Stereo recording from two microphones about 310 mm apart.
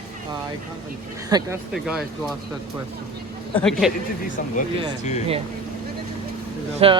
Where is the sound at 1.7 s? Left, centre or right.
Centre.